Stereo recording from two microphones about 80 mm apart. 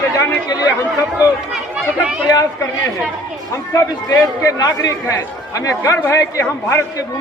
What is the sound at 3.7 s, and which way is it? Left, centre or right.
A man's voice, left.